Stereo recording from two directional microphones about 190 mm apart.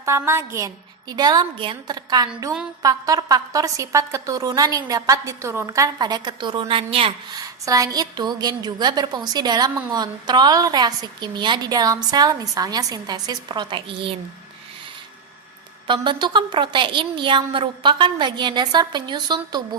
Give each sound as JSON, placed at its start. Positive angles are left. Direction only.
{"t": 0.0, "sound": "a woman's voice", "side_deg": -15}
{"t": 7.4, "sound": "a woman's voice", "side_deg": -20}
{"t": 15.9, "sound": "a woman's voice", "side_deg": -25}